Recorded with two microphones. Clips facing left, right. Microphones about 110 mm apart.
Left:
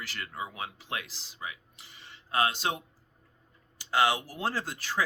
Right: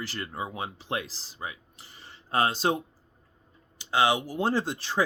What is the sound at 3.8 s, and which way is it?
Speech, 20° right (ahead or behind).